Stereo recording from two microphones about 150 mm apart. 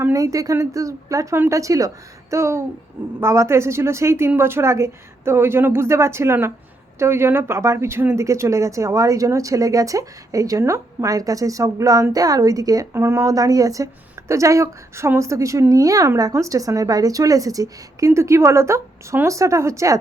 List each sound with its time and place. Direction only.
0.0 s a woman's voice: 20° right (ahead or behind)